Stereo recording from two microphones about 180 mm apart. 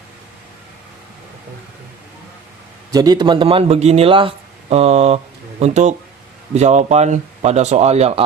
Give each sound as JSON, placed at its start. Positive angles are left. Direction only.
{"t": 2.9, "sound": "a man's voice", "side_deg": -20}